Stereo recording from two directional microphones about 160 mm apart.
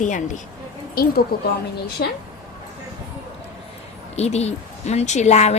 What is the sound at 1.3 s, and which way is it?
Speech, 70° left (ahead or behind).